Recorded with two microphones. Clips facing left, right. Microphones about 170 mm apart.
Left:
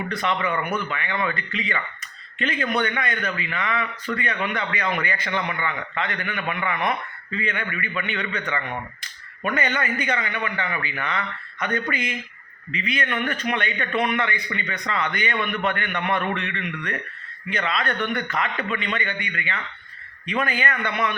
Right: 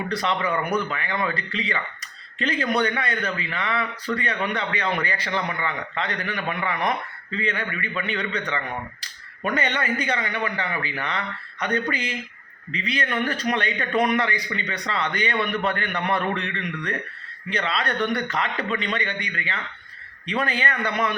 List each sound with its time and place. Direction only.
0.1 s a man's voice: 35° right (ahead or behind)